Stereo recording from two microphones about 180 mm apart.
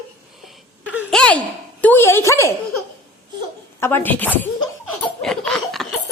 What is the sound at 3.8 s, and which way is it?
Speech, 10° left (ahead or behind).